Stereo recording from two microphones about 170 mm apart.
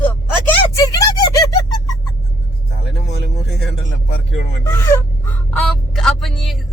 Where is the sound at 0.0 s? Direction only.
10° left (ahead or behind).